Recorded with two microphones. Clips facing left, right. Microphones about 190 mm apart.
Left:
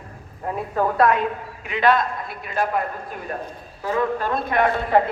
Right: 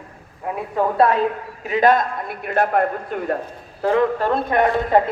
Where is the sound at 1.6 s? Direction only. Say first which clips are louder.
Right 3 dB; 45° right (ahead or behind); by 3.3 s 65° right (ahead or behind).